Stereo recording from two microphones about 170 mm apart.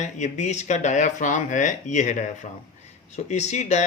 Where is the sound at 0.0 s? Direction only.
45° left (ahead or behind).